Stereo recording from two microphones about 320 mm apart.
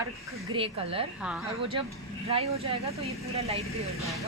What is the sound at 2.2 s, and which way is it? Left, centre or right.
Speech, centre.